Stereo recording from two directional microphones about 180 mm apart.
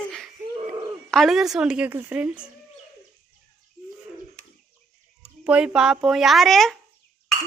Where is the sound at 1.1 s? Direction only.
Centre (ahead or behind).